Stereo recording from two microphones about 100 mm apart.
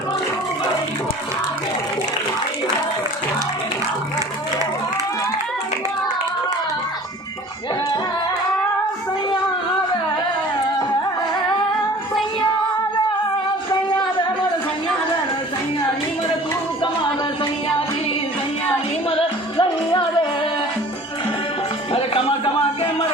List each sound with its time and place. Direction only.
16.8 s music: 55° left (ahead or behind)
19.0 s music: 65° left (ahead or behind)
21.9 s music: 70° left (ahead or behind)
22.4 s a sound: 60° left (ahead or behind)